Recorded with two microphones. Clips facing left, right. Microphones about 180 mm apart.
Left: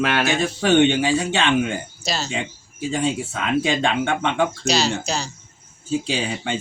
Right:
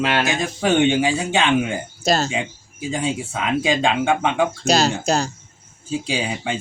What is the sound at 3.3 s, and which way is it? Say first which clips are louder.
Speech: right 1 dB; 15° right (ahead or behind).